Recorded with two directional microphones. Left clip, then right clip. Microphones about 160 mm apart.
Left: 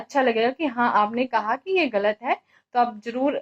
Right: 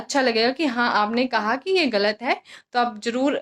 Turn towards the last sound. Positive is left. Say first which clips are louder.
# right 2 dB
turn(degrees=-30)  # may be behind; listen again after turning